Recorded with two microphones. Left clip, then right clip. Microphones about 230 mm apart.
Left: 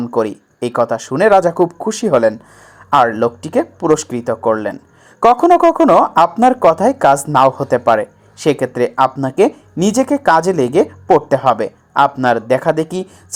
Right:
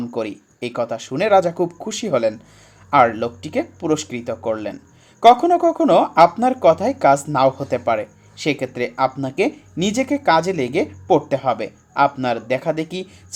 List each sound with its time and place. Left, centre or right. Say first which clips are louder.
0.0 s speech: left 8 dB; centre